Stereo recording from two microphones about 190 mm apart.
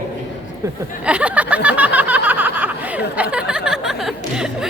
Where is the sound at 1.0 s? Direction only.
5° right (ahead or behind).